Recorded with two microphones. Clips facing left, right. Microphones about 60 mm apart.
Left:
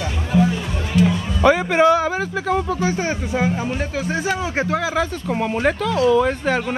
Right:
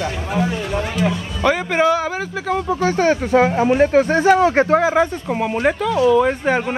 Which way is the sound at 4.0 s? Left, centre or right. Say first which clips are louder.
Right 7 dB; right.